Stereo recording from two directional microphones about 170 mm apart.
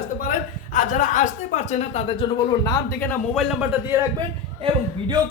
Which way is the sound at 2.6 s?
15° left (ahead or behind).